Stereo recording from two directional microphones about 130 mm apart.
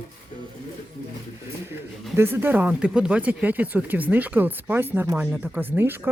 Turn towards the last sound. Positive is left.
turn(degrees=-15)  # may be behind; listen again after turning